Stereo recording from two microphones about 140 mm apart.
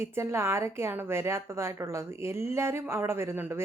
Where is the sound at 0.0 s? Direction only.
20° right (ahead or behind).